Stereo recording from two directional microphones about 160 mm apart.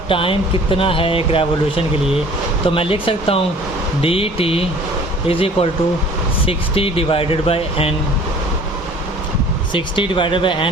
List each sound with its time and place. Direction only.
0.1 s speech: 35° left (ahead or behind)
9.7 s speech: 30° left (ahead or behind)